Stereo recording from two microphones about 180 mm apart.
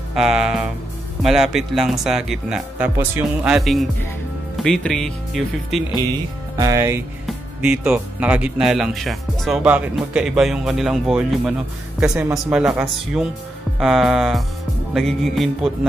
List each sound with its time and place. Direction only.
0.1 s speech: 5° right (ahead or behind)
6.5 s speech: 15° right (ahead or behind); by 15.9 s centre (ahead or behind)